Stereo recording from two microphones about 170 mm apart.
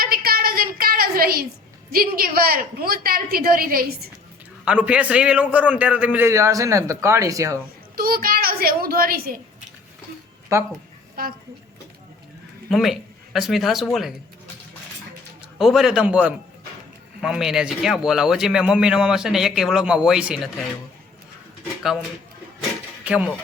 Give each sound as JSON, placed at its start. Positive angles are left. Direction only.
{"t": 0.0, "sound": "a sound", "side_deg": -60}
{"t": 1.9, "sound": "a woman's voice", "side_deg": -60}
{"t": 4.6, "sound": "a man's voice", "side_deg": -5}
{"t": 7.9, "sound": "a child's voice", "side_deg": -60}
{"t": 10.5, "sound": "a man's voice", "side_deg": -15}
{"t": 11.2, "sound": "a woman's voice", "side_deg": -60}
{"t": 12.7, "sound": "speech", "side_deg": 0}
{"t": 15.5, "sound": "speech", "side_deg": 0}
{"t": 23.0, "sound": "a man's voice", "side_deg": -5}